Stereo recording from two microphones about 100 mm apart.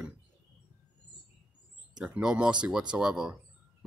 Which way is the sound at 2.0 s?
10° right (ahead or behind).